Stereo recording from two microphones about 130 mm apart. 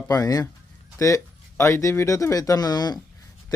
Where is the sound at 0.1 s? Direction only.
30° left (ahead or behind).